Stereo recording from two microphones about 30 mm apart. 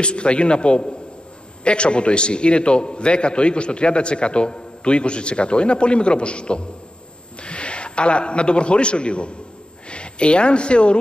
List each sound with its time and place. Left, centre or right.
0.0 s a man's voice: left